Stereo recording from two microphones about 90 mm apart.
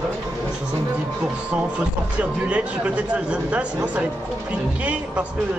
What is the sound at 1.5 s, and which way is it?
Speech, 15° right (ahead or behind).